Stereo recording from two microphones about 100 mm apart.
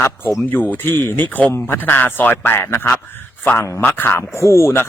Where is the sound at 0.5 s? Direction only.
20° left (ahead or behind).